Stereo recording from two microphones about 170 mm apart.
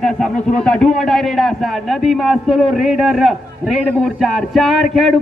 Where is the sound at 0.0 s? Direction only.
5° left (ahead or behind).